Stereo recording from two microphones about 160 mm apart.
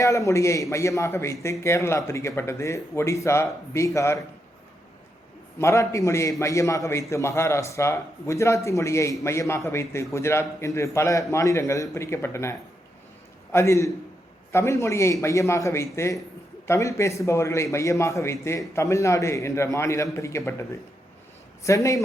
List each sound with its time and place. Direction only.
0.0 s a man's voice: 20° left (ahead or behind)
5.5 s a man's voice: 20° left (ahead or behind)